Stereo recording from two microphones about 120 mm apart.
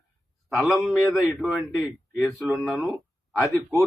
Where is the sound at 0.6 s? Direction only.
Centre (ahead or behind).